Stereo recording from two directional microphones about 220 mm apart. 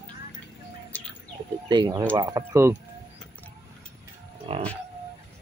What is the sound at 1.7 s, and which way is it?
Speech, 20° right (ahead or behind).